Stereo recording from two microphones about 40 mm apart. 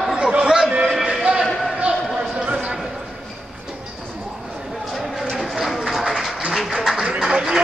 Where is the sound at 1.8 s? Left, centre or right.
Right.